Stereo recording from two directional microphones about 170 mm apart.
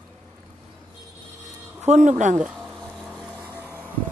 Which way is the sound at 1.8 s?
45° right (ahead or behind).